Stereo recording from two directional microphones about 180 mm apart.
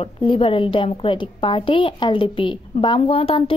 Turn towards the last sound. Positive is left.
turn(degrees=30)  # may be behind; listen again after turning